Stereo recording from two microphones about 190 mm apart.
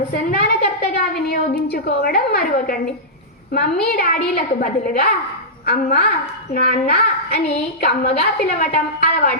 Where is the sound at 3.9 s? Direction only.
50° left (ahead or behind).